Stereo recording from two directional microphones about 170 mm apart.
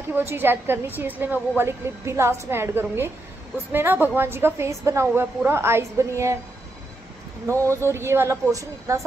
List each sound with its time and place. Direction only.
0.1 s a woman's voice: 15° right (ahead or behind)
7.4 s a woman's voice: 15° right (ahead or behind)